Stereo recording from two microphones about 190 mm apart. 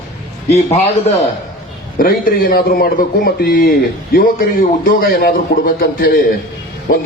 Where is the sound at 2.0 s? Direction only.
50° left (ahead or behind).